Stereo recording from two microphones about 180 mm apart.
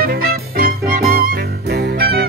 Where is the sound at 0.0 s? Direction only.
55° right (ahead or behind).